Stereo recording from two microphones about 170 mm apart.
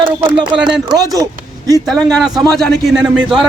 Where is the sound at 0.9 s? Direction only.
20° right (ahead or behind).